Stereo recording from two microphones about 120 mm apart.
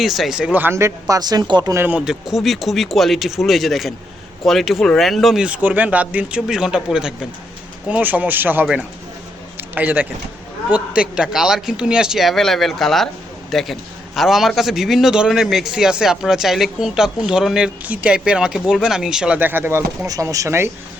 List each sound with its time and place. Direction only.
0.0 s speech: centre (ahead or behind); by 1.7 s 35° right (ahead or behind)
1.7 s speech: 20° right (ahead or behind)
2.0 s a man's voice: 5° right (ahead or behind)
9.6 s a sound: 15° right (ahead or behind)
10.7 s a man's voice: 10° right (ahead or behind)
20.1 s speech: 30° right (ahead or behind)